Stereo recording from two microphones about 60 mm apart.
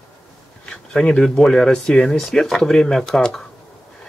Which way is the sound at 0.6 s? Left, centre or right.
Centre.